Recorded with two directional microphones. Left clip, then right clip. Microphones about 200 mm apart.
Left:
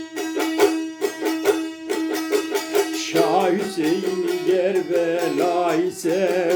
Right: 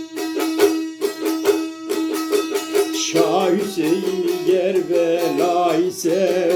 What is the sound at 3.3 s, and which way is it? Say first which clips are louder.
Music: right 1 dB; centre (ahead or behind).